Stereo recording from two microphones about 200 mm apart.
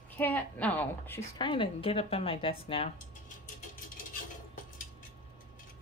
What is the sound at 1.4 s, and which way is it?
A woman's voice, 25° left (ahead or behind).